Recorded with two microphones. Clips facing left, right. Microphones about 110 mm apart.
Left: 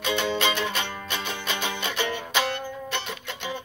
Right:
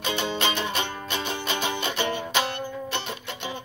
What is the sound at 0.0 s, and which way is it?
Music, 30° right (ahead or behind).